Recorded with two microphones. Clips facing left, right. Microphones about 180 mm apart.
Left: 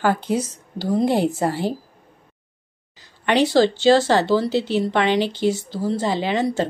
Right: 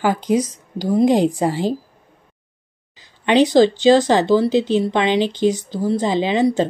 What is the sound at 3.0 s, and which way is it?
Speech, 15° right (ahead or behind).